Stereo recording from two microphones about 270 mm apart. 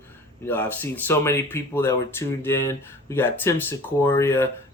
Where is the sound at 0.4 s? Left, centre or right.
Centre.